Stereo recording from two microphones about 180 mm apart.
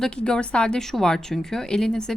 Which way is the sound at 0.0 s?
5° left (ahead or behind).